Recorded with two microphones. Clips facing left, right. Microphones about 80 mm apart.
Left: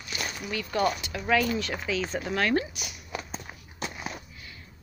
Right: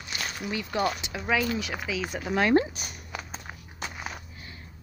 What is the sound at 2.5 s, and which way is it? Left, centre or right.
Speech, right.